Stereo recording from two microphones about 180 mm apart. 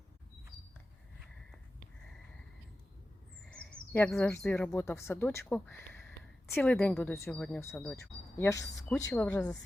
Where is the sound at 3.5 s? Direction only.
5° left (ahead or behind).